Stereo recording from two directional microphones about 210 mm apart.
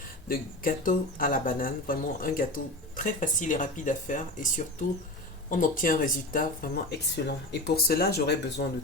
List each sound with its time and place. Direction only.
0.3 s speech: 40° left (ahead or behind)